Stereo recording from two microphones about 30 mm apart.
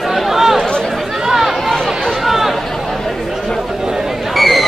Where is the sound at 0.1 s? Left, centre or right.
Centre.